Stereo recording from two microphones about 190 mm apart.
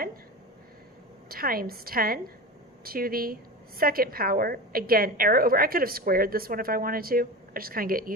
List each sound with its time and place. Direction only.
1.3 s a woman's voice: 50° right (ahead or behind)